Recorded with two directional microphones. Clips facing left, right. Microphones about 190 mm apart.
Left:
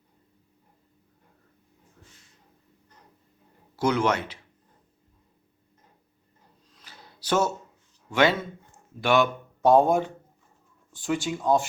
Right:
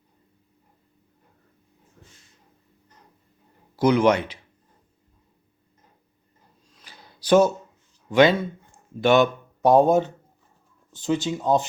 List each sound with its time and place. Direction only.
3.8 s speech: 15° right (ahead or behind)
6.8 s a sound: 15° right (ahead or behind)
8.1 s speech: 20° right (ahead or behind)